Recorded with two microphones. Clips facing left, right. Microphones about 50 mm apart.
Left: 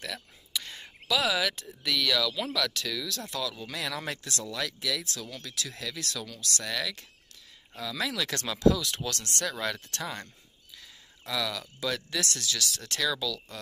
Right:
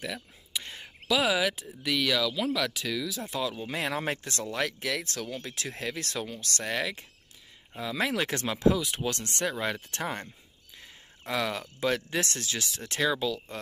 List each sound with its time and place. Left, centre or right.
0.0 s speech: centre
3.6 s speech: right
8.0 s speech: right
8.4 s speech: right
10.8 s speech: right